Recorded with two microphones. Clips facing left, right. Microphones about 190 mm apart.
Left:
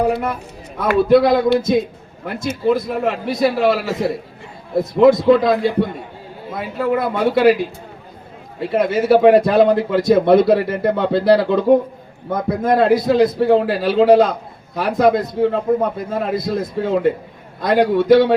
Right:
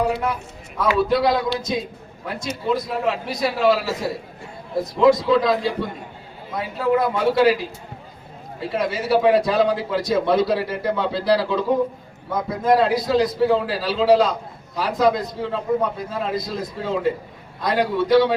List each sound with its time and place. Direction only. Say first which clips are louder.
0.8 s a man's voice: left 6 dB; 55° left (ahead or behind)